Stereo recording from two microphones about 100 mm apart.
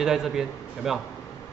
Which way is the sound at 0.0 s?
5° right (ahead or behind).